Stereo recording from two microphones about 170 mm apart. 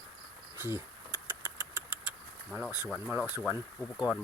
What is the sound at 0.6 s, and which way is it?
Speech, 15° right (ahead or behind).